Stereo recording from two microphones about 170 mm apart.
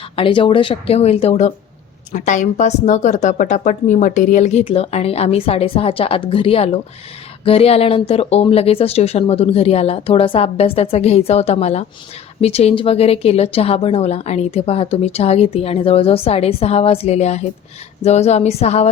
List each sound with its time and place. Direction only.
0.2 s speech: 30° left (ahead or behind)